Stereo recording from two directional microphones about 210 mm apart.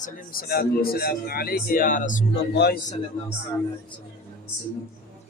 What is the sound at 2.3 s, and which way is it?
Speech, 50° left (ahead or behind).